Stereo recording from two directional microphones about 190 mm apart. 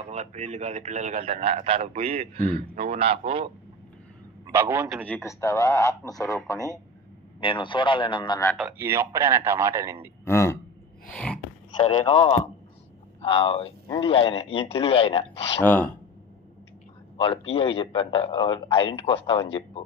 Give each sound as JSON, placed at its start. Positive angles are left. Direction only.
{"t": 0.1, "sound": "a man's voice", "side_deg": -35}
{"t": 4.5, "sound": "speech", "side_deg": -10}
{"t": 5.0, "sound": "a man's voice", "side_deg": 10}
{"t": 8.7, "sound": "speech", "side_deg": -10}
{"t": 10.2, "sound": "a sound", "side_deg": 15}
{"t": 12.1, "sound": "a man's voice", "side_deg": 40}
{"t": 13.2, "sound": "a man's voice", "side_deg": 30}
{"t": 15.6, "sound": "speech", "side_deg": 10}
{"t": 17.2, "sound": "a man's voice", "side_deg": 30}